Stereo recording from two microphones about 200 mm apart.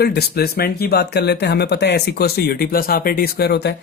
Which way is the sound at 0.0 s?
50° left (ahead or behind).